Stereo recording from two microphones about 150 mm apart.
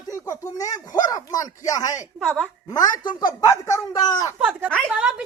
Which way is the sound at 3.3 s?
20° left (ahead or behind).